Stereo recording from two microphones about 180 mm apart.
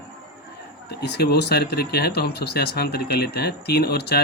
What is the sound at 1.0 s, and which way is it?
Speech, 65° left (ahead or behind).